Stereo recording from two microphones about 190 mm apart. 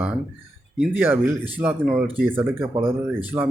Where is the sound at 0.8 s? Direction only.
10° right (ahead or behind).